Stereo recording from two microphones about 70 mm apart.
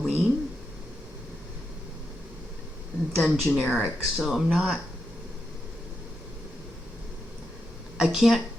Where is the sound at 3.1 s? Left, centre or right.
Centre.